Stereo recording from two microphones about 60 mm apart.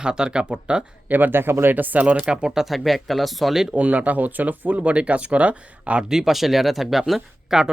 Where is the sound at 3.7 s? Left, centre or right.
Right.